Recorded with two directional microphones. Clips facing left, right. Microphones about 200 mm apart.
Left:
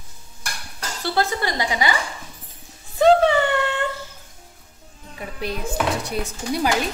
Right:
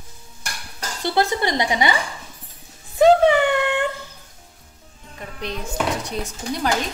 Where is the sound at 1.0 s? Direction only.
20° right (ahead or behind).